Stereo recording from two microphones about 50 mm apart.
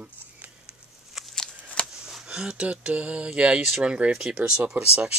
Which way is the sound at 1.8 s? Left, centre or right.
Centre.